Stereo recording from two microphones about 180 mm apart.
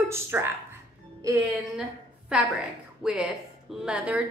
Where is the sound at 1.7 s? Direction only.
5° right (ahead or behind).